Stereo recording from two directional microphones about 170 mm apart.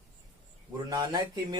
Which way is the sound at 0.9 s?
25° right (ahead or behind).